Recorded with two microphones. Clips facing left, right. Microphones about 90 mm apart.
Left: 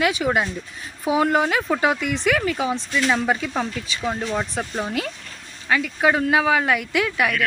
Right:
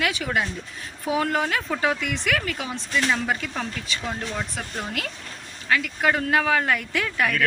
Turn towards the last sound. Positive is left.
turn(degrees=5)  # may be behind; listen again after turning